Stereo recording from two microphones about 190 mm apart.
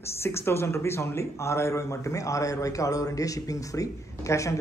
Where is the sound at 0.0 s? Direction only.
15° left (ahead or behind).